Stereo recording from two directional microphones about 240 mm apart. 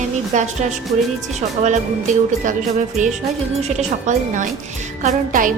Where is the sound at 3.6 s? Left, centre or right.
Right.